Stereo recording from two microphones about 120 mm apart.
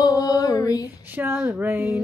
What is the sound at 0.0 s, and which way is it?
Female singing, 30° left (ahead or behind).